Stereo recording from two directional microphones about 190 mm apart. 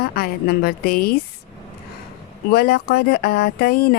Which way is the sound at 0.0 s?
55° left (ahead or behind).